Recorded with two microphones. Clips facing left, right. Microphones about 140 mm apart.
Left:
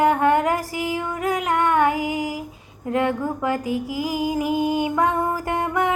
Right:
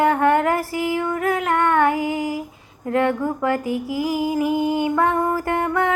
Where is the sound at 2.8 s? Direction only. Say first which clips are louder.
Right 2 dB; 15° left (ahead or behind).